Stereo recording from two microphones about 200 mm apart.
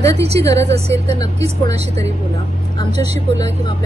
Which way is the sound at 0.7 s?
30° right (ahead or behind).